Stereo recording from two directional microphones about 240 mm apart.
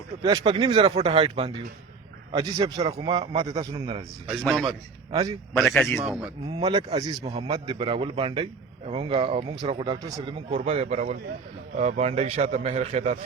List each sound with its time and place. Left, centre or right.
0.2 s a man's voice: centre
4.3 s a man's voice: centre
6.6 s a man's voice: right